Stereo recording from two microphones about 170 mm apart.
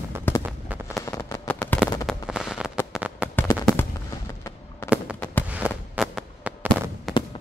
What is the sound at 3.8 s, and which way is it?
Fireworks, 15° left (ahead or behind).